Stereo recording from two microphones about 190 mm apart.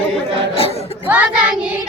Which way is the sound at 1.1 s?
5° right (ahead or behind).